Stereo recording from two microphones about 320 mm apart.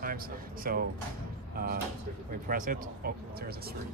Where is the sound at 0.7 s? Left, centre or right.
Right.